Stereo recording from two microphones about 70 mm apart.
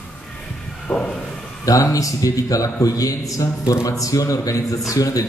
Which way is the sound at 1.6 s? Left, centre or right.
Left.